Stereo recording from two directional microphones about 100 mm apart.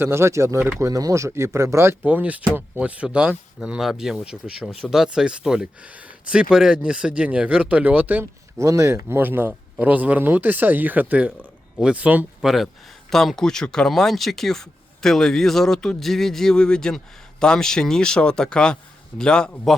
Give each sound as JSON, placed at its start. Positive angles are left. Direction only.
{"t": 0.0, "sound": "speech", "side_deg": -25}
{"t": 2.0, "sound": "speech", "side_deg": -15}
{"t": 8.2, "sound": "speech", "side_deg": -30}